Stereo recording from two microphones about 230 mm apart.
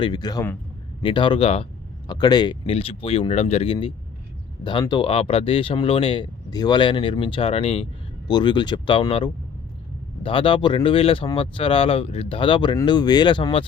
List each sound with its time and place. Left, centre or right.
0.0 s speech: centre